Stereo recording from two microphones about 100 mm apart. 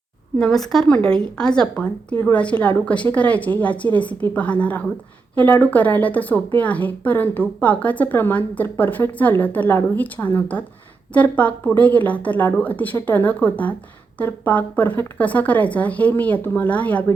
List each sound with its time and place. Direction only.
0.3 s speech: 5° left (ahead or behind)